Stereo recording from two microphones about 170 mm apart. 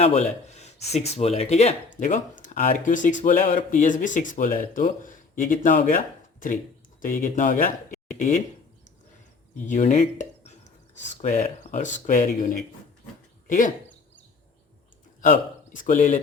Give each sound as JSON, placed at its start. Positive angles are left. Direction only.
{"t": 0.0, "sound": "speech", "side_deg": 40}
{"t": 7.0, "sound": "speech", "side_deg": 50}
{"t": 9.6, "sound": "speech", "side_deg": 45}
{"t": 13.5, "sound": "speech", "side_deg": 50}
{"t": 15.2, "sound": "a man's voice", "side_deg": 50}